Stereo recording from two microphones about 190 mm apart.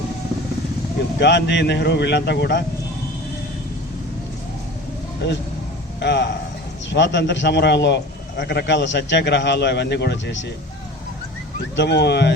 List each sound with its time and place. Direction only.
1.2 s a man's voice: 65° left (ahead or behind)
5.2 s a man's voice: 65° left (ahead or behind)
11.8 s a man's voice: 65° left (ahead or behind)